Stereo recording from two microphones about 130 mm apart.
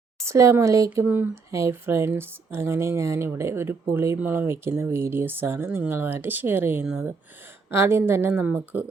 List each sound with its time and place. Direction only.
0.3 s speech: 20° right (ahead or behind); by 7.1 s 5° right (ahead or behind)
7.7 s speech: 20° right (ahead or behind)